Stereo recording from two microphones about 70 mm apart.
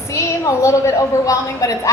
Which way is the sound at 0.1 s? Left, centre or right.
Left.